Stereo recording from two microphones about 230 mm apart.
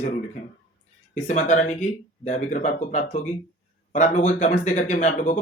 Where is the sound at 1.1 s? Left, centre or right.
Left.